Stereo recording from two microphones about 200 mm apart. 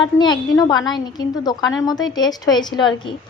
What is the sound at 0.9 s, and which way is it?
Speech, 20° left (ahead or behind).